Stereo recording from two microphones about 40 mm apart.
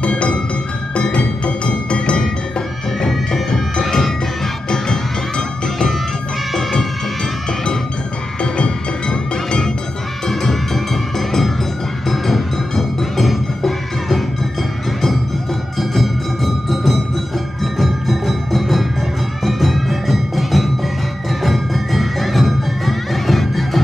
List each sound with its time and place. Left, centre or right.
0.0 s music: left
3.8 s music: centre
6.5 s music: centre
8.4 s music: left; by 14.2 s centre
15.8 s music: centre